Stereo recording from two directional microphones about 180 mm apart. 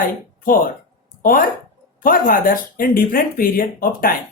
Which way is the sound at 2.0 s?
50° left (ahead or behind).